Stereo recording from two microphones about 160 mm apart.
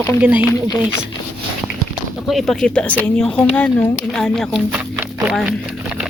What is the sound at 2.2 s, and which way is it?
Speech, centre (ahead or behind).